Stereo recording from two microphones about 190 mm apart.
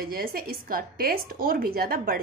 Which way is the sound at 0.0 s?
50° right (ahead or behind).